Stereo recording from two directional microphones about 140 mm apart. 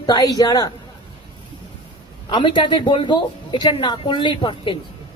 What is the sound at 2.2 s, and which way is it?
Speech, 35° left (ahead or behind).